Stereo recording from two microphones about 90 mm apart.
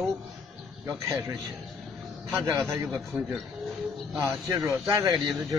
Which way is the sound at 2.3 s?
30° right (ahead or behind).